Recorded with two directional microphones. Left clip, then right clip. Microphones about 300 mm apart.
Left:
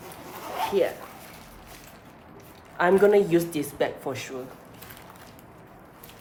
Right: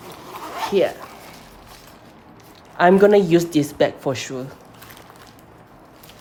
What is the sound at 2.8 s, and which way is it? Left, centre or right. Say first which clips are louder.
Speech: right 6 dB; right.